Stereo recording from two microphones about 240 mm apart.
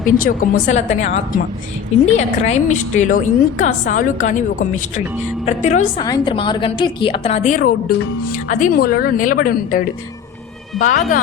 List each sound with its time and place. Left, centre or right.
0.0 s a woman's voice: left
6.0 s a woman's voice: centre; by 11.2 s left